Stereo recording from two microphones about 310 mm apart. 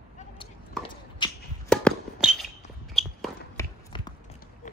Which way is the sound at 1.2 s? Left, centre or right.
Centre.